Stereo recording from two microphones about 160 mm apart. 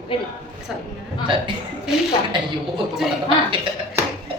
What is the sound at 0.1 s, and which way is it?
Speech, 35° left (ahead or behind).